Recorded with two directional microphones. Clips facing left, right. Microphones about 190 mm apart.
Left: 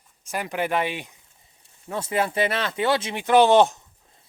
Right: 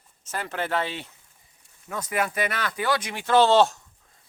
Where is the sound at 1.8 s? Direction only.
30° left (ahead or behind).